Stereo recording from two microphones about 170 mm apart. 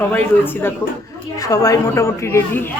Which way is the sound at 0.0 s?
10° left (ahead or behind).